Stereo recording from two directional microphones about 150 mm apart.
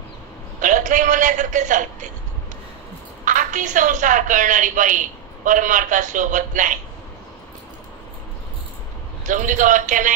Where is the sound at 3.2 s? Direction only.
60° right (ahead or behind).